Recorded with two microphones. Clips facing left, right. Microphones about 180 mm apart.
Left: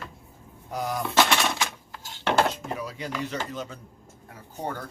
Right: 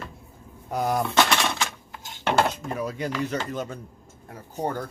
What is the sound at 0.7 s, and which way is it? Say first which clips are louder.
Speech: right 5 dB; 55° right (ahead or behind).